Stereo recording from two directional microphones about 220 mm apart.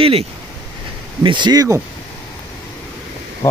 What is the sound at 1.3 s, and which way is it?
Speech, 20° right (ahead or behind).